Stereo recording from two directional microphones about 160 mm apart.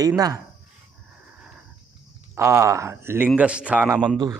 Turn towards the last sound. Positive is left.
turn(degrees=-10)  # may be behind; listen again after turning